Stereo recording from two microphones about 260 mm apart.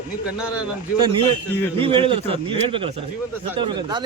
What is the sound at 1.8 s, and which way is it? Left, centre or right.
A man's voice, centre.